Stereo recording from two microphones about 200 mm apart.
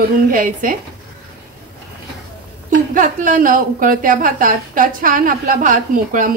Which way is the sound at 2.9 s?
40° right (ahead or behind).